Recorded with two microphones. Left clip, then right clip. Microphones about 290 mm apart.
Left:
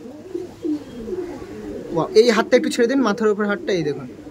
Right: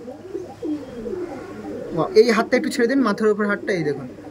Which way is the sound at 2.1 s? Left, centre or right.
Centre.